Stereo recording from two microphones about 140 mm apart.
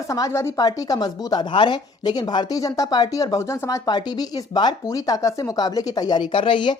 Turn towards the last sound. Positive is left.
turn(degrees=35)  # may be behind; listen again after turning